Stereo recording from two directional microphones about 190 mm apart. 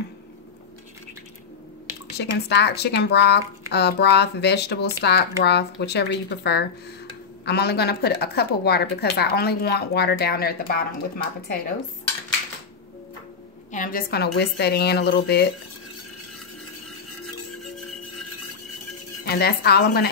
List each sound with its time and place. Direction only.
2.1 s speech: 60° left (ahead or behind)
13.7 s speech: 45° left (ahead or behind); by 15.5 s 60° left (ahead or behind)
19.2 s speech: 55° left (ahead or behind)